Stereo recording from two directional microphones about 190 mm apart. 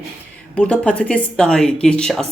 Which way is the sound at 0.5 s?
5° left (ahead or behind).